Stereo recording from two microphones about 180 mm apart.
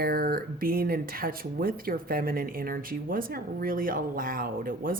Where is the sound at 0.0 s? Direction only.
55° right (ahead or behind).